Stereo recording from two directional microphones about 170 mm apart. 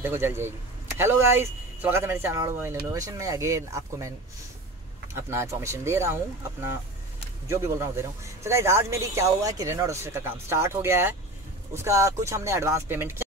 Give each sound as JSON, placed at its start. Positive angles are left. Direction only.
{"t": 0.0, "sound": "a man's voice", "side_deg": -15}
{"t": 5.1, "sound": "a man's voice", "side_deg": -15}